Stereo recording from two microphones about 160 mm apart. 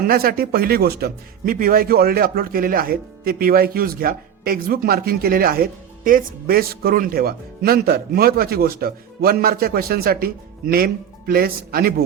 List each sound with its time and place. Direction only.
0.1 s a man's voice: 70° right (ahead or behind)